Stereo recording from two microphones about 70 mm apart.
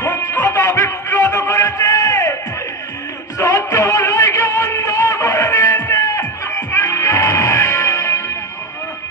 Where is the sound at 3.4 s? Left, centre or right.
Left.